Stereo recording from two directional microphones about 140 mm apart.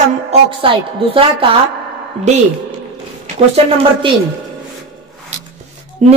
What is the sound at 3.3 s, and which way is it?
Speech, 45° right (ahead or behind).